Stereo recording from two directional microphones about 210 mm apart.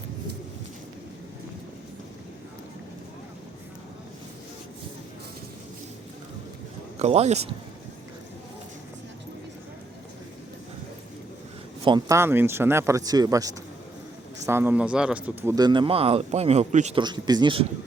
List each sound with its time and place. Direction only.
7.0 s speech: 30° right (ahead or behind)
11.9 s speech: 15° right (ahead or behind)
17.0 s speech: 20° right (ahead or behind)